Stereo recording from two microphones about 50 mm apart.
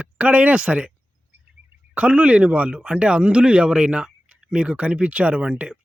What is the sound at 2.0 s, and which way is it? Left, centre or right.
Speech, right.